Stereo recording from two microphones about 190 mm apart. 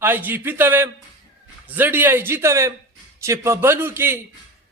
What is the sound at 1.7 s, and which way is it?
A man's voice, 10° right (ahead or behind).